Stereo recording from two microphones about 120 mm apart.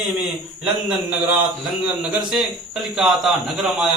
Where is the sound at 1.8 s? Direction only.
5° right (ahead or behind).